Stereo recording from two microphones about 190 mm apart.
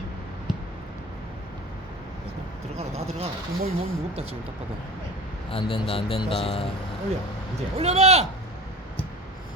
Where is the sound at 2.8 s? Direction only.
35° right (ahead or behind).